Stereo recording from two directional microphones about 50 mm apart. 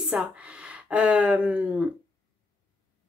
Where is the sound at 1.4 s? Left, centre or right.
Right.